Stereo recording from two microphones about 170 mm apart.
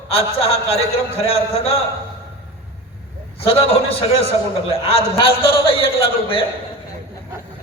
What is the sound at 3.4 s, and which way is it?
A man's voice, 35° left (ahead or behind).